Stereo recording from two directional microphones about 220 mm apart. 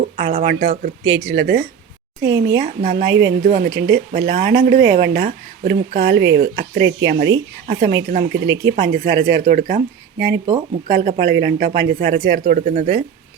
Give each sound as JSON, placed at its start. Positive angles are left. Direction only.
{"t": 0.3, "sound": "speech", "side_deg": -40}
{"t": 1.0, "sound": "speech", "side_deg": -55}
{"t": 2.6, "sound": "speech", "side_deg": -40}
{"t": 3.1, "sound": "speech", "side_deg": -55}
{"t": 3.4, "sound": "speech", "side_deg": -40}
{"t": 3.7, "sound": "speech", "side_deg": -55}
{"t": 8.7, "sound": "speech", "side_deg": -40}